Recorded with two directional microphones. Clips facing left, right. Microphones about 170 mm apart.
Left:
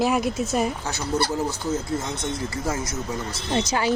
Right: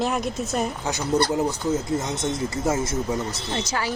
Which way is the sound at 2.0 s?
25° right (ahead or behind).